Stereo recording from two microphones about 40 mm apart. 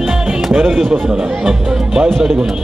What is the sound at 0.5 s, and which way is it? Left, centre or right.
Speech, centre.